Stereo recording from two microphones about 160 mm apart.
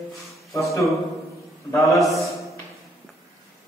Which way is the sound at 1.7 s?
20° left (ahead or behind).